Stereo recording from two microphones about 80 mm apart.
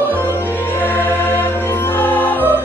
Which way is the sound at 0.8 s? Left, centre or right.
Left.